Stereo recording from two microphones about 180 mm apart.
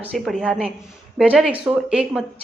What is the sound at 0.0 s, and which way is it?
A woman's voice, 5° left (ahead or behind).